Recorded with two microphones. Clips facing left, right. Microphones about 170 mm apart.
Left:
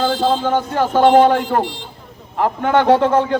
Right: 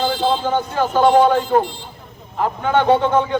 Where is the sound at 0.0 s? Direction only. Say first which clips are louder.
Left 2 dB; 45° left (ahead or behind).